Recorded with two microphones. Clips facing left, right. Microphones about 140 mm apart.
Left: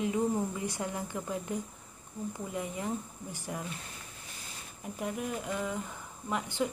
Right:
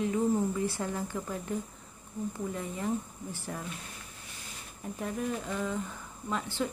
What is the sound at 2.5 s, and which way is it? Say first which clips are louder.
Speech: left 1 dB; 15° left (ahead or behind).